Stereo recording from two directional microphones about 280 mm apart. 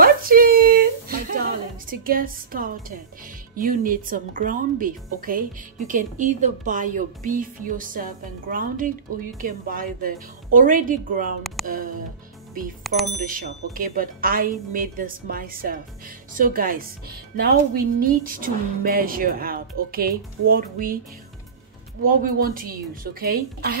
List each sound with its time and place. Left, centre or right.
0.0 s a sound: right
1.9 s speech: right
12.8 s speech: centre
13.2 s speech: right
22.0 s speech: right